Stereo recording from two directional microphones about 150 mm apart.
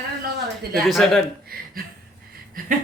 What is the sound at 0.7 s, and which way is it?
Speech, centre (ahead or behind).